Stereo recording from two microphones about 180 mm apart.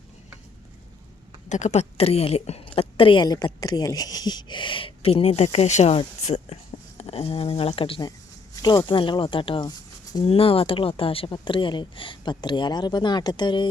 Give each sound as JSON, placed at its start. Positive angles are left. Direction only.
{"t": 1.5, "sound": "a woman's voice", "side_deg": 40}